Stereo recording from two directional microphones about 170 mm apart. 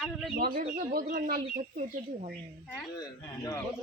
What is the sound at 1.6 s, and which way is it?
Speech, 40° right (ahead or behind).